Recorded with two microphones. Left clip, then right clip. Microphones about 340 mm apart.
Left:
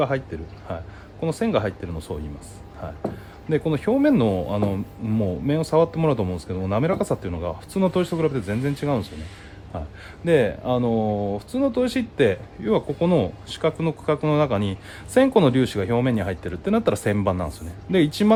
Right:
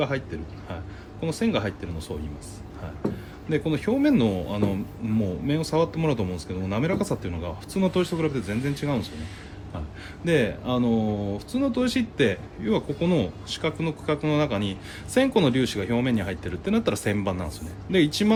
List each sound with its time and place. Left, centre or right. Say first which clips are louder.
0.7 s a sound: left 6 dB; left
1.2 s speech: left 4 dB; left
3.5 s speech: left 3 dB; left
10.2 s speech: left 4 dB; left